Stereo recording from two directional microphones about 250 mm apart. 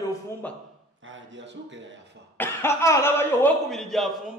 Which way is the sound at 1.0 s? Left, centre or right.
Right.